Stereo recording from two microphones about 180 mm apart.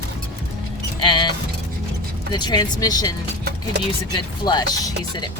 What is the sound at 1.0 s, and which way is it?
Speech, 25° left (ahead or behind).